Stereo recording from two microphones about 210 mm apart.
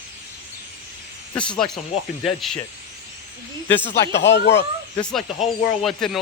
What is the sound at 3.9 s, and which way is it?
Speech, 55° left (ahead or behind).